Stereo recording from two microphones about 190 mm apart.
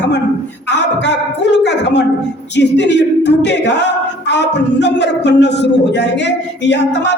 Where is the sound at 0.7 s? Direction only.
65° left (ahead or behind).